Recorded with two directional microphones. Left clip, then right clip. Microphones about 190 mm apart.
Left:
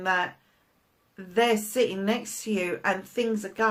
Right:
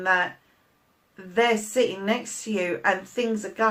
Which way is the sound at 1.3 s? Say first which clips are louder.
Right 2 dB; 45° left (ahead or behind).